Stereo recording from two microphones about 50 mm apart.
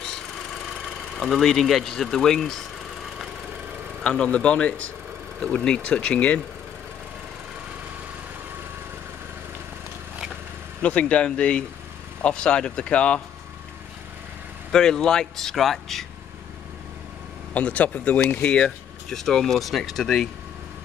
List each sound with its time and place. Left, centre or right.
1.1 s speech: centre
4.0 s speech: left
10.8 s speech: left
14.7 s speech: centre
17.6 s speech: left
18.5 s a sound: left
19.1 s speech: centre